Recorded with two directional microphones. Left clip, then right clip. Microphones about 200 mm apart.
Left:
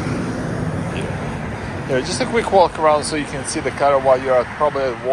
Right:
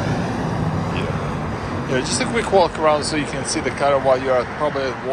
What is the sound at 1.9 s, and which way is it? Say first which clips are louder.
Speech: left 2 dB; 5° right (ahead or behind).